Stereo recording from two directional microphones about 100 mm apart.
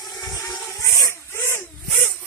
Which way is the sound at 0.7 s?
30° left (ahead or behind).